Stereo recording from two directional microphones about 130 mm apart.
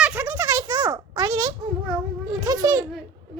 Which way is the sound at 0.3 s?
30° right (ahead or behind).